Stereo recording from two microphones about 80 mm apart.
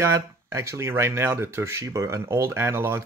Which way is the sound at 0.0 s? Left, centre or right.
Right.